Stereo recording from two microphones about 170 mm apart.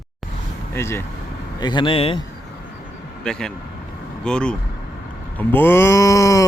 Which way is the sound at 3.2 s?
5° left (ahead or behind).